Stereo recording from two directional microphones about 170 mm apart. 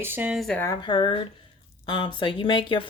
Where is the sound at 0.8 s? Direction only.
30° left (ahead or behind).